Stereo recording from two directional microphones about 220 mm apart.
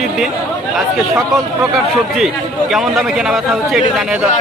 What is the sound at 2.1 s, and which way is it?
Speech, centre (ahead or behind).